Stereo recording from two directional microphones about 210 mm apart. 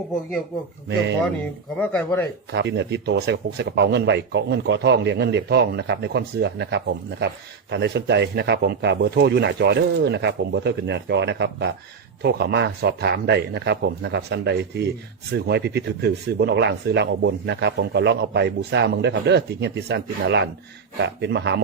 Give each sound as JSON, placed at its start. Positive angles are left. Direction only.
{"t": 1.8, "sound": "speech", "side_deg": 10}
{"t": 2.5, "sound": "speech", "side_deg": -55}